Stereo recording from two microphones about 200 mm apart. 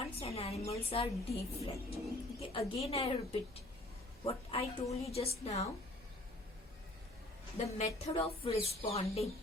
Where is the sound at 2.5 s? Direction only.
30° left (ahead or behind).